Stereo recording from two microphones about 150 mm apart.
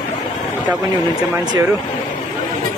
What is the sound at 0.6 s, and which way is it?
Speech, 10° right (ahead or behind).